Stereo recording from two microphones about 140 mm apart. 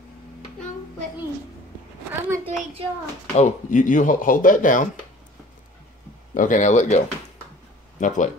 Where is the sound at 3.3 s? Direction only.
60° left (ahead or behind).